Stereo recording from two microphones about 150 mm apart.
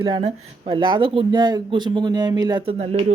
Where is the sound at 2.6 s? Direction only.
40° right (ahead or behind).